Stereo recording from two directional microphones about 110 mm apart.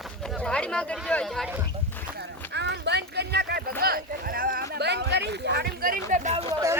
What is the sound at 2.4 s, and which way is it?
Clip-clop, 20° left (ahead or behind).